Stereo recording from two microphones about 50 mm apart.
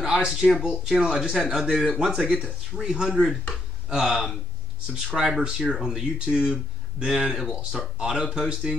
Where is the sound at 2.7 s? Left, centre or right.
Centre.